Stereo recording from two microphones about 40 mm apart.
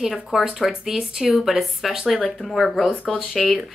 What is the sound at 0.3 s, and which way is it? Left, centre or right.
A woman's voice, centre.